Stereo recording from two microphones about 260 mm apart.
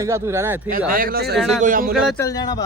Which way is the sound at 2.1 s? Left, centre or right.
Centre.